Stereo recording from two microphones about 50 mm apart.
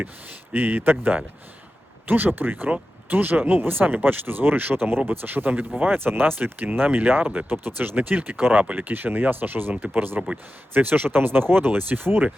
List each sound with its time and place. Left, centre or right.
0.5 s speech: right
7.5 s speech: right